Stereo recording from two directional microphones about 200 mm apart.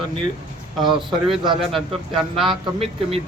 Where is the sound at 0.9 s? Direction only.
Centre (ahead or behind).